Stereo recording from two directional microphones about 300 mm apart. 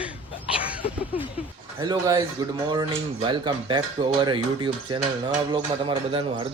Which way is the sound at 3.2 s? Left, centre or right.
Centre.